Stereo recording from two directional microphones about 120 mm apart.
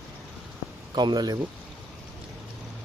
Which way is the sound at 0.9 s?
40° right (ahead or behind).